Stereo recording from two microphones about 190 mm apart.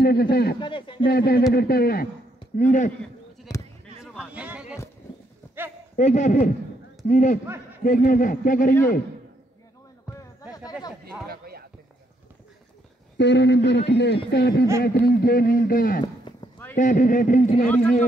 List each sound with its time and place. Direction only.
0.0 s speech: 55° left (ahead or behind)
0.6 s speech: 25° left (ahead or behind)
1.0 s a man's voice: 55° left (ahead or behind)
2.5 s speech: 40° left (ahead or behind)
3.5 s basketball bounce: 20° left (ahead or behind)
4.0 s a sound: 5° right (ahead or behind)
5.9 s a man's voice: 40° left (ahead or behind)
10.5 s speech: 20° left (ahead or behind)
11.2 s a sound: 55° right (ahead or behind)
13.2 s a man's voice: 65° left (ahead or behind); by 17.7 s 45° left (ahead or behind)